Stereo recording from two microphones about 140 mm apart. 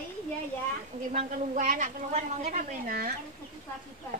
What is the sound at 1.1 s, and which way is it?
A woman's voice, 65° right (ahead or behind).